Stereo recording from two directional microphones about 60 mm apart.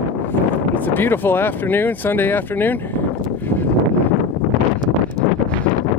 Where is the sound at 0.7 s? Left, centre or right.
Left.